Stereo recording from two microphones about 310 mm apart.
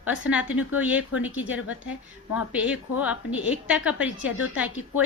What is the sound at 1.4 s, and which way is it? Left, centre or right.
Speech, left.